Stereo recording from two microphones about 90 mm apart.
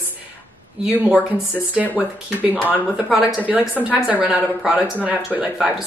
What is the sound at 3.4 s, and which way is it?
Speech, 20° right (ahead or behind).